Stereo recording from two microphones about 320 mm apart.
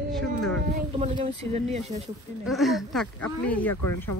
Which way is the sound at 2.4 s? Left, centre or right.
Centre.